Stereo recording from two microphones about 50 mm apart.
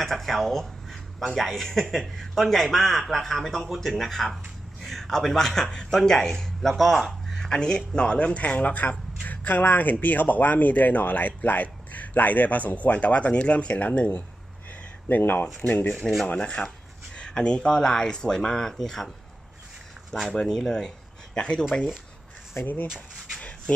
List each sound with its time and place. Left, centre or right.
0.0 s a man's voice: centre
7.4 s speech: centre; by 16.0 s left
16.3 s speech: left